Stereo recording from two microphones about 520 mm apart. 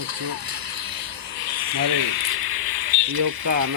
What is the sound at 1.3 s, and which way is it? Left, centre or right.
Speech, right.